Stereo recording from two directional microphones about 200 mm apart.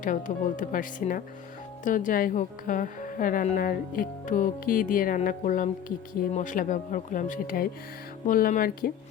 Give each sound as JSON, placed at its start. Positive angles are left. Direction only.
{"t": 0.0, "sound": "speech", "side_deg": 40}